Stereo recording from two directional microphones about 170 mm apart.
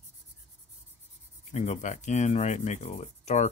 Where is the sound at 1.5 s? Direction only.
45° left (ahead or behind).